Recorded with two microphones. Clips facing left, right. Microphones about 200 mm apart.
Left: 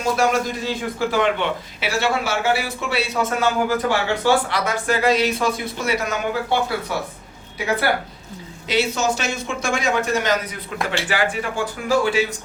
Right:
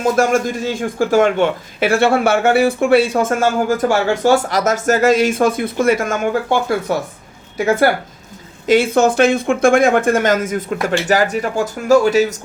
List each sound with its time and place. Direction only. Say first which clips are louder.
0.0 s a man's voice: right 5 dB; 50° right (ahead or behind)
8.6 s a man's voice: right 8 dB; 50° right (ahead or behind)